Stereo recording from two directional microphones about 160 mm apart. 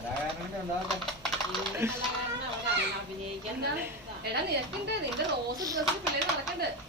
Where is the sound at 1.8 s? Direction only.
15° right (ahead or behind).